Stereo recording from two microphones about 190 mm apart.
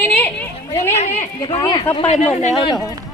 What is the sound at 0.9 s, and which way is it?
Speech, 35° left (ahead or behind).